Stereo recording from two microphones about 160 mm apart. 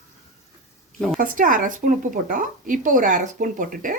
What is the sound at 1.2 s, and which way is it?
A woman's voice, 60° right (ahead or behind).